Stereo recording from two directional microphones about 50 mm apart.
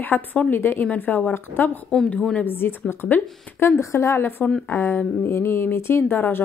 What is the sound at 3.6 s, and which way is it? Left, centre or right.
A woman's voice, left.